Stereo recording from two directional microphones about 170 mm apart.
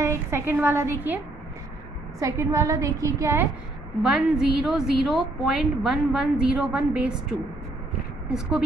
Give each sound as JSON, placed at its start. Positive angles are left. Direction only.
{"t": 0.0, "sound": "a woman's voice", "side_deg": -15}
{"t": 2.1, "sound": "a woman's voice", "side_deg": -20}
{"t": 4.0, "sound": "a woman's voice", "side_deg": -5}